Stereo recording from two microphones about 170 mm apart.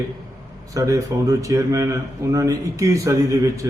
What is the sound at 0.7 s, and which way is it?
A man's voice, 20° right (ahead or behind).